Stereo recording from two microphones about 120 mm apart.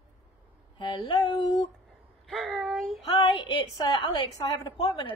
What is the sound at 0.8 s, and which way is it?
Speech, 40° left (ahead or behind).